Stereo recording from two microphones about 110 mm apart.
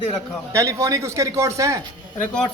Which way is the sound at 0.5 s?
30° right (ahead or behind).